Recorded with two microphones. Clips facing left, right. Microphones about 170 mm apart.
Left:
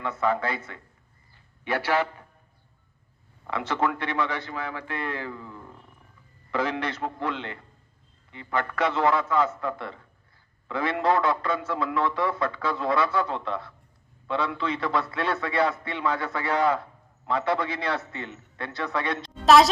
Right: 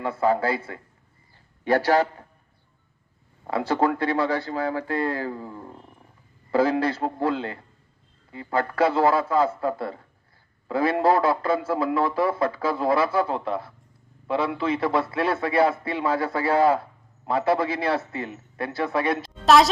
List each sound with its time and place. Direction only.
0.0 s speech: 30° right (ahead or behind)
3.4 s a man's voice: 35° right (ahead or behind)
19.2 s a sound: centre (ahead or behind)